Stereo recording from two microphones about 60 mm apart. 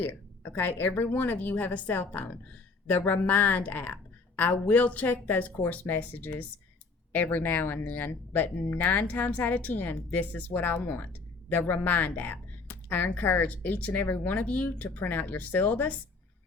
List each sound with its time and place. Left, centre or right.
0.5 s speech: left